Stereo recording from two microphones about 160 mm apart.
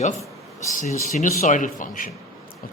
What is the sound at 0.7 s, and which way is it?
A man's voice, 55° left (ahead or behind).